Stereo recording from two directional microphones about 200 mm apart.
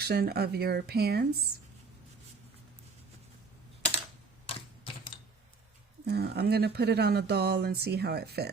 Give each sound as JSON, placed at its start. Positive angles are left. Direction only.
{"t": 0.0, "sound": "speech", "side_deg": -50}
{"t": 6.1, "sound": "speech", "side_deg": -55}